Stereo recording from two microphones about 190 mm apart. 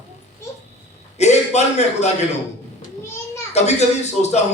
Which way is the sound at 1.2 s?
35° left (ahead or behind).